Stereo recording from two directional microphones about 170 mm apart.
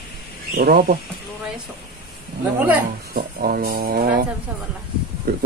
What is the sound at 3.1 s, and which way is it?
A man's voice, 60° right (ahead or behind).